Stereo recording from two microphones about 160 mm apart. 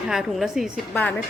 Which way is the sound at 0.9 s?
10° left (ahead or behind).